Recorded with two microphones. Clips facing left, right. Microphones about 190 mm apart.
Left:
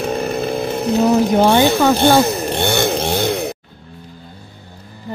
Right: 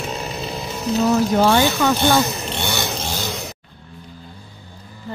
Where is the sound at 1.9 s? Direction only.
55° left (ahead or behind).